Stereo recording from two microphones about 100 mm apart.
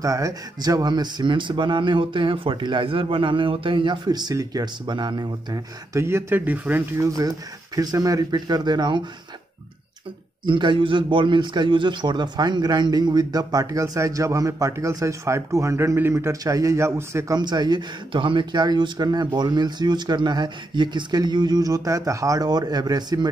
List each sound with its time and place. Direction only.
0.0 s speech: 35° right (ahead or behind)
5.9 s speech: 25° right (ahead or behind)
7.0 s a man's voice: 35° right (ahead or behind)
10.4 s a man's voice: 55° right (ahead or behind); by 17.4 s 30° right (ahead or behind)
17.4 s speech: 45° right (ahead or behind)